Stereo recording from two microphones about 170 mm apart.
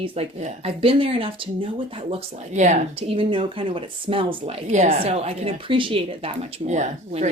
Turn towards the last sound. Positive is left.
turn(degrees=-45)  # may be behind; listen again after turning